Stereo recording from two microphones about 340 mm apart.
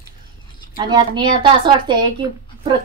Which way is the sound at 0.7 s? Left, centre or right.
Centre.